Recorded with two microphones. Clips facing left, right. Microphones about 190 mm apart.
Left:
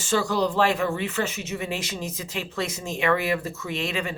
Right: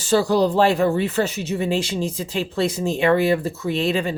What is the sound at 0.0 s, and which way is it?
Speech, 35° right (ahead or behind).